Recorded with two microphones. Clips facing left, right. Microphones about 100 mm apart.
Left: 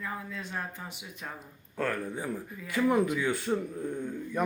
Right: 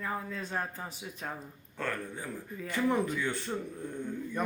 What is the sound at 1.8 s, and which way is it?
Speech, 10° left (ahead or behind).